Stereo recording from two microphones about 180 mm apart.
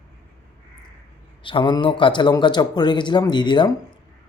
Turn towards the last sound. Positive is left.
turn(degrees=25)  # may be behind; listen again after turning